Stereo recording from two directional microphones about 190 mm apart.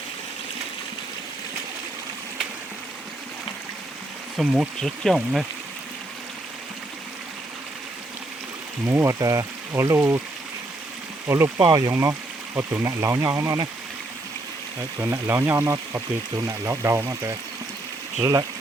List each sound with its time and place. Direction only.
4.4 s speech: 5° right (ahead or behind)
8.9 s speech: 15° right (ahead or behind)
11.3 s speech: 15° right (ahead or behind)
14.9 s speech: 15° right (ahead or behind)